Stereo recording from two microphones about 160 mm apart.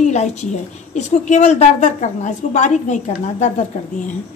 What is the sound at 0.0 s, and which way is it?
A woman's voice, 45° left (ahead or behind).